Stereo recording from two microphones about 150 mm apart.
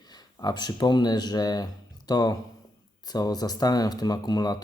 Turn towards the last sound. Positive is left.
turn(degrees=25)  # may be behind; listen again after turning